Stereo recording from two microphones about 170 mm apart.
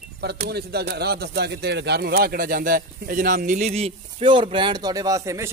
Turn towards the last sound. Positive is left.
turn(degrees=-20)  # may be behind; listen again after turning